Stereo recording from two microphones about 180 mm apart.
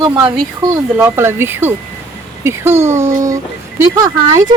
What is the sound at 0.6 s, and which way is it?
Speech, 15° right (ahead or behind).